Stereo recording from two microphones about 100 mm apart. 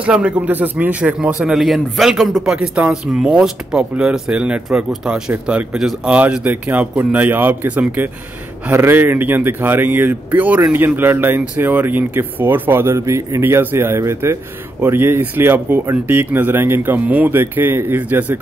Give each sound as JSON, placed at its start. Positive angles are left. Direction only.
{"t": 0.0, "sound": "speech", "side_deg": -10}
{"t": 6.1, "sound": "speech", "side_deg": -15}